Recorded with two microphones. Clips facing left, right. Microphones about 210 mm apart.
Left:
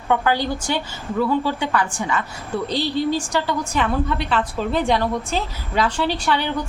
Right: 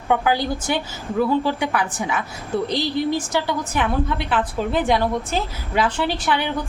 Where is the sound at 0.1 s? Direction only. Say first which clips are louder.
Even; 15° right (ahead or behind).